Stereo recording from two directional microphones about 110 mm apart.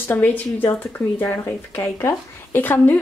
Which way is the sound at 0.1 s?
20° left (ahead or behind).